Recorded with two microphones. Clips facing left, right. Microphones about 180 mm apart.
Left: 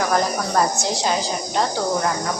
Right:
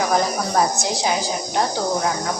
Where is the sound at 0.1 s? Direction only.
Centre (ahead or behind).